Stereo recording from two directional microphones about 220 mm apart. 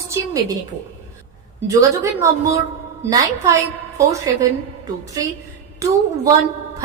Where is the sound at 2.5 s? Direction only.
15° right (ahead or behind).